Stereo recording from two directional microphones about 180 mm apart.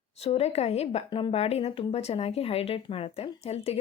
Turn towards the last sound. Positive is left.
turn(degrees=35)  # may be behind; listen again after turning